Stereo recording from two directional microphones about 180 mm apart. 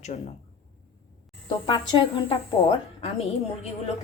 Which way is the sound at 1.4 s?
25° left (ahead or behind).